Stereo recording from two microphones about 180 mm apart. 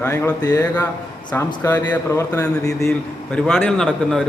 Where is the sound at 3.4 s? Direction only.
Centre (ahead or behind).